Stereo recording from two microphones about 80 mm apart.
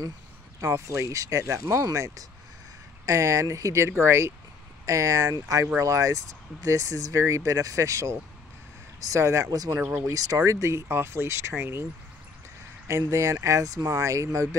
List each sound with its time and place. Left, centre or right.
0.6 s speech: right
4.8 s speech: right
9.8 s speech: centre
10.0 s speech: right
12.8 s speech: right